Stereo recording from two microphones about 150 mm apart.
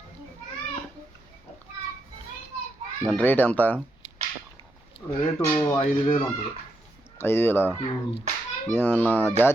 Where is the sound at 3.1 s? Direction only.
10° left (ahead or behind).